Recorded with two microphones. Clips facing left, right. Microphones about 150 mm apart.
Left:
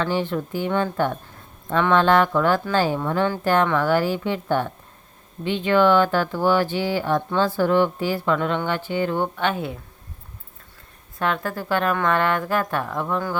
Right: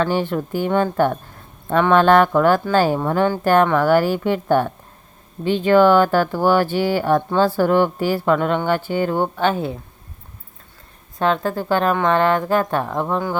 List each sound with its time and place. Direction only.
0.0 s a woman's voice: 50° right (ahead or behind)
5.4 s a woman's voice: 40° right (ahead or behind)
11.2 s speech: 30° right (ahead or behind)